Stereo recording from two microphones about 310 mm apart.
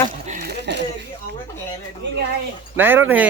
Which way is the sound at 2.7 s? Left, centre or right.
Centre.